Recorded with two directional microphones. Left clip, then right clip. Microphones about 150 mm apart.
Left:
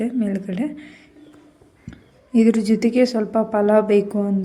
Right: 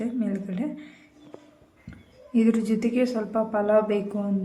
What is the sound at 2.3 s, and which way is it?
A woman's voice, 35° left (ahead or behind).